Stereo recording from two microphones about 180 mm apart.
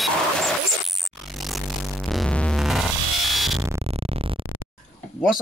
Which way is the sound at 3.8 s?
35° right (ahead or behind).